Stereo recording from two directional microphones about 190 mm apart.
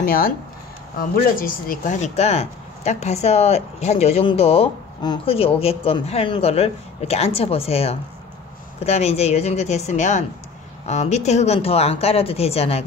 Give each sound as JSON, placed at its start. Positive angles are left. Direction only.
{"t": 0.0, "sound": "speech", "side_deg": 50}